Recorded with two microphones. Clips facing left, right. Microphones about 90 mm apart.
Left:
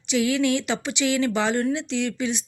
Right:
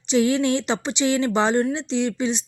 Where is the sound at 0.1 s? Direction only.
30° right (ahead or behind).